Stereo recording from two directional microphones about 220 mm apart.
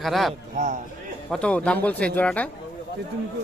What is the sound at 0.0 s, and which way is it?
Speech, centre (ahead or behind).